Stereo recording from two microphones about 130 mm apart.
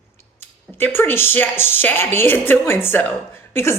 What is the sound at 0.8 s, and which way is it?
A woman's voice, 15° left (ahead or behind).